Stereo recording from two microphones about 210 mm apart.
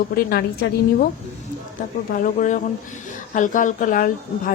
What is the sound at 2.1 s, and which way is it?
Speech, 35° left (ahead or behind).